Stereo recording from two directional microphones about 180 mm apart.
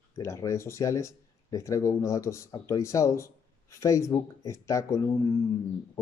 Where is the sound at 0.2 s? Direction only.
15° left (ahead or behind).